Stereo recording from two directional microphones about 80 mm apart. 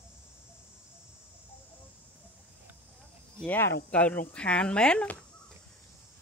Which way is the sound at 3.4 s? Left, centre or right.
Left.